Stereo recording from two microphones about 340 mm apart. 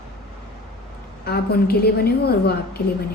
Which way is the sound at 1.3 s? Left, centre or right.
Left.